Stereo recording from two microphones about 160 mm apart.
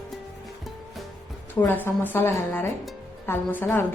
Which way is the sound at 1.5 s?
10° left (ahead or behind).